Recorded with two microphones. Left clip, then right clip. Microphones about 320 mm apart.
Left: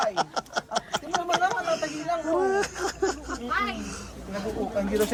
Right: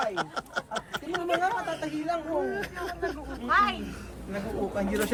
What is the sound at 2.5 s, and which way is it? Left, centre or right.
Speech, left.